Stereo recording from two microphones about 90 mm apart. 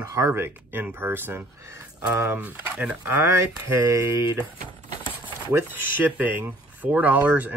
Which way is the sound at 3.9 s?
35° right (ahead or behind).